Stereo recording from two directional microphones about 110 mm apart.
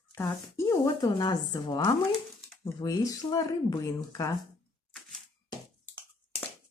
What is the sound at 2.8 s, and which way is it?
Speech, 30° left (ahead or behind).